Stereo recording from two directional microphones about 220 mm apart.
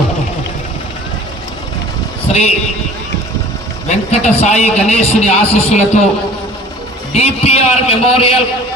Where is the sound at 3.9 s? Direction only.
30° left (ahead or behind).